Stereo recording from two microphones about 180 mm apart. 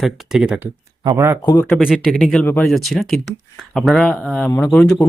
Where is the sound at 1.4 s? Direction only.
15° left (ahead or behind).